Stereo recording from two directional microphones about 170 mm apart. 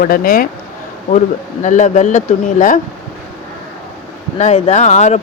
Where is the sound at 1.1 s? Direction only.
45° left (ahead or behind).